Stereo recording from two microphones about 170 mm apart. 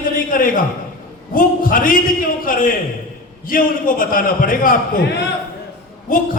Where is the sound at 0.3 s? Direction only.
55° left (ahead or behind).